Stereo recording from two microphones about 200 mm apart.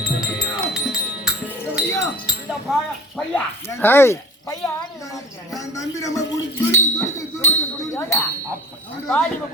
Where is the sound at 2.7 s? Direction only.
Centre (ahead or behind).